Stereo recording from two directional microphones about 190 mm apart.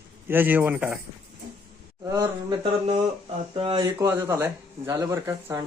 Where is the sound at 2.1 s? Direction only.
20° right (ahead or behind).